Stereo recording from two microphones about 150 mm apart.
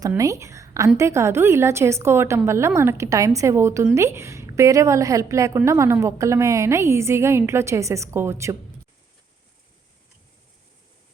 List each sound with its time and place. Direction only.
0.2 s a woman's voice: 20° right (ahead or behind)